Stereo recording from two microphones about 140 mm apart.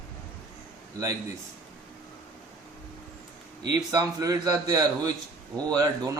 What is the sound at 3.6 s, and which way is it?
A man's voice, 30° right (ahead or behind).